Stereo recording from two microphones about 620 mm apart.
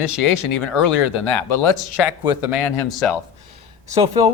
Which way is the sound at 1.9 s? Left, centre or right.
Centre.